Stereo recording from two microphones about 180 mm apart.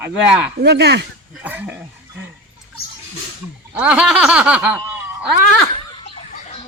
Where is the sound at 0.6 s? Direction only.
65° right (ahead or behind).